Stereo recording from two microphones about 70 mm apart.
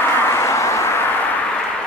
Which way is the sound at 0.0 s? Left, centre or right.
Left.